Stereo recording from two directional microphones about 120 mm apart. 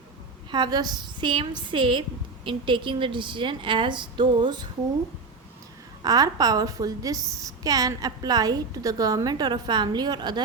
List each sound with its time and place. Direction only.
0.5 s a woman's voice: 35° right (ahead or behind)
6.0 s a woman's voice: 30° right (ahead or behind)